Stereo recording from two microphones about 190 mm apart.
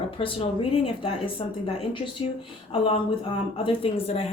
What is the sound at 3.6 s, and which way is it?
Speech, 30° left (ahead or behind).